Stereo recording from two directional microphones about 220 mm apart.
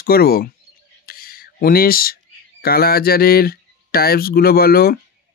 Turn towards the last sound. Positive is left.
turn(degrees=45)  # may be behind; listen again after turning